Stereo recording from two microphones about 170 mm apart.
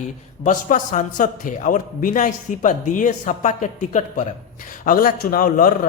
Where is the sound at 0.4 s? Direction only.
50° left (ahead or behind).